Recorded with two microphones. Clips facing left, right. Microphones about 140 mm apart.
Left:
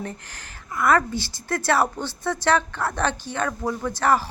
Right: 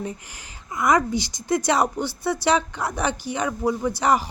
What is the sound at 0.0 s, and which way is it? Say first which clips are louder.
A woman's voice: right 2 dB; 15° right (ahead or behind).